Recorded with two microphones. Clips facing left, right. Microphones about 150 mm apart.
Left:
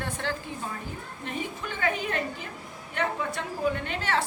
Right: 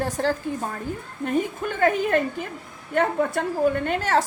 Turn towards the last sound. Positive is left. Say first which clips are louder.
# right 7 dB
turn(degrees=-45)  # may be behind; listen again after turning